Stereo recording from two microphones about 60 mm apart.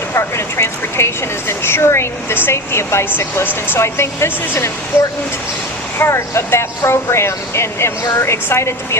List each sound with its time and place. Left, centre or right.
0.1 s speech: left
3.2 s speech: left
6.0 s speech: left